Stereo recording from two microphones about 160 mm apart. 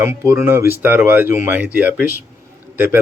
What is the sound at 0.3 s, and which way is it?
Speech, 15° right (ahead or behind).